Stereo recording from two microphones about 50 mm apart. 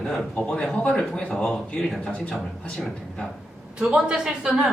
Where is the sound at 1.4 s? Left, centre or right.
Centre.